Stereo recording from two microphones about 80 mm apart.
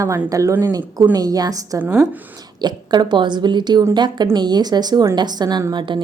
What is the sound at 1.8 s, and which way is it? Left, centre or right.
Speech, right.